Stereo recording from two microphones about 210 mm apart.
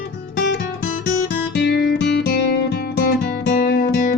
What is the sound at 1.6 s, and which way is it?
Music, 50° left (ahead or behind).